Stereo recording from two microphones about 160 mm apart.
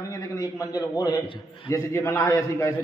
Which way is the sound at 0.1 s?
20° left (ahead or behind).